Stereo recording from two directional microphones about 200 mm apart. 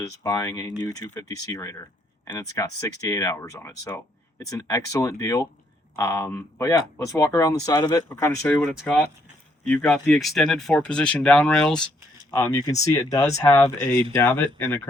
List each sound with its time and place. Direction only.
0.2 s speech: 15° left (ahead or behind)
12.8 s speech: 15° left (ahead or behind)